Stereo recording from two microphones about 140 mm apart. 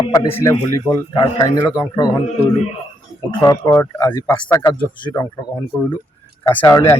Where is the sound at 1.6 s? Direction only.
20° left (ahead or behind).